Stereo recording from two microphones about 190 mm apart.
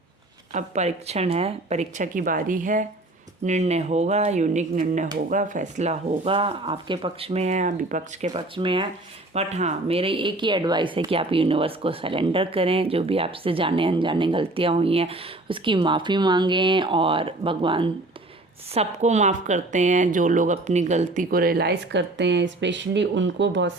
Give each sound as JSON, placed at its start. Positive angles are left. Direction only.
{"t": 0.5, "sound": "speech", "side_deg": -35}